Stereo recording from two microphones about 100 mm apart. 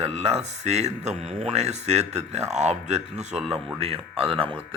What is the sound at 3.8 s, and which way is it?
Speech, 80° right.